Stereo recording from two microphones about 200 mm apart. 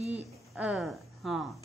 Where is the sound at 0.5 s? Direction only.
Centre (ahead or behind).